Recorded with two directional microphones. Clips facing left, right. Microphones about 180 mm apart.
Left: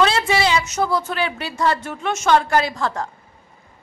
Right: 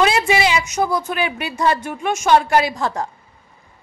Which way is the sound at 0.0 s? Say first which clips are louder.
Right 1 dB; 15° right (ahead or behind).